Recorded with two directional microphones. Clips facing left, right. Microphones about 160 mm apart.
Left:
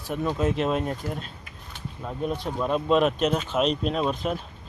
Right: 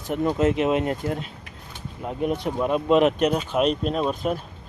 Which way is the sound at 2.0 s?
20° right (ahead or behind).